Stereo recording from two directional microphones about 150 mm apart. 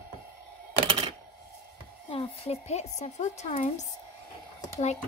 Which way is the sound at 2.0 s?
40° left (ahead or behind).